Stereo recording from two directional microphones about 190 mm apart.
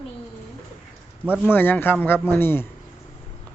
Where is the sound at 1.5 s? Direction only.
10° left (ahead or behind).